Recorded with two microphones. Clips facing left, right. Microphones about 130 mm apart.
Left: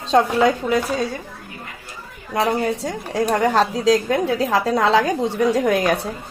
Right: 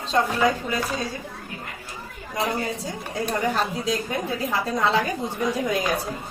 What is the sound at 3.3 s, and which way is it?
A woman's voice, 90° left.